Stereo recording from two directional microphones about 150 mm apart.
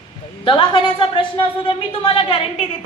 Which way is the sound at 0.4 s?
35° left (ahead or behind).